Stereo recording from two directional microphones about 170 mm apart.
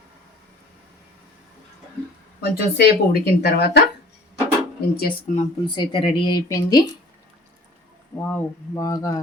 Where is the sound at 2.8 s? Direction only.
70° left (ahead or behind).